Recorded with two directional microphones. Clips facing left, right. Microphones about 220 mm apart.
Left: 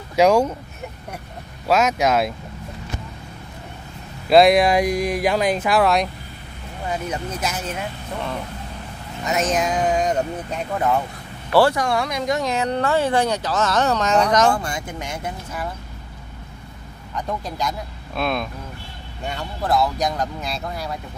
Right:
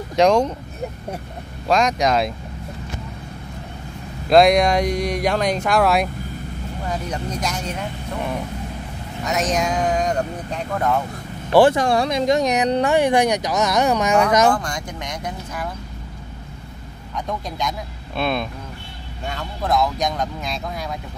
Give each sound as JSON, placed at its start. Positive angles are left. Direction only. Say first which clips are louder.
{"t": 0.1, "sound": "speech", "louder": "even", "side_deg": 5}
{"t": 1.7, "sound": "speech", "louder": "even", "side_deg": 5}
{"t": 4.3, "sound": "speech", "louder": "even", "side_deg": 5}
{"t": 9.2, "sound": "speech", "louder": "even", "side_deg": 0}
{"t": 11.5, "sound": "speech", "louder": "right 3 dB", "side_deg": -20}
{"t": 14.5, "sound": "speech", "louder": "right 1 dB", "side_deg": 5}
{"t": 17.1, "sound": "speech", "louder": "even", "side_deg": 5}